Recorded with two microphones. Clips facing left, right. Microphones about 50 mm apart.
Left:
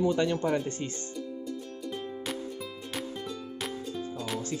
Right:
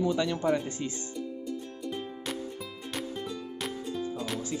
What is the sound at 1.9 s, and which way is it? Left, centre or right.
Music, centre.